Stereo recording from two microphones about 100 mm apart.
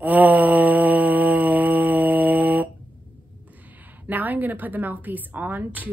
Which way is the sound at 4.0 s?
15° right (ahead or behind).